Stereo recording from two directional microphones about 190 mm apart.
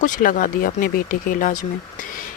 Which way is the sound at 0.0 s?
45° left (ahead or behind).